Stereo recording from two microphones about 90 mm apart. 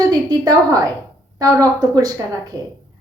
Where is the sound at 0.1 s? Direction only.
45° right (ahead or behind).